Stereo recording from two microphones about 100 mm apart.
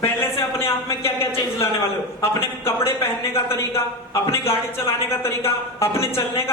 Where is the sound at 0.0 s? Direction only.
25° left (ahead or behind).